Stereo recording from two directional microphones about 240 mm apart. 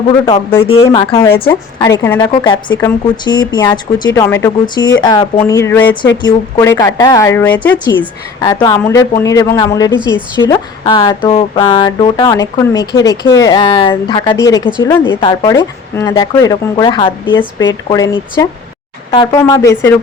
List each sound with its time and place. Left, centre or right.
0.6 s speech: left
15.0 s speech: left